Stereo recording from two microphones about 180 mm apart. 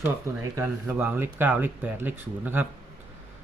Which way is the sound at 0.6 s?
10° right (ahead or behind).